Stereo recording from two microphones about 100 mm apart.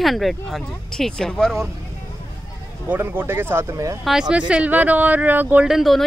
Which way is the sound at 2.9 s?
20° right (ahead or behind).